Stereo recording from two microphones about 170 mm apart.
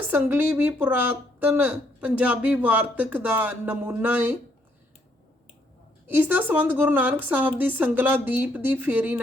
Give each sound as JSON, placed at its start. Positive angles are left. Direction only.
{"t": 0.1, "sound": "a woman's voice", "side_deg": -10}
{"t": 6.1, "sound": "a woman's voice", "side_deg": -10}